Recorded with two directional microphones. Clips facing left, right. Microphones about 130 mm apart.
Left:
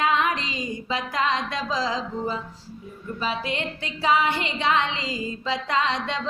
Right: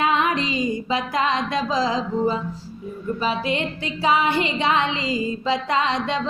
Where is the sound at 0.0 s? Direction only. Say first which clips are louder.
Right 2 dB; 20° right (ahead or behind).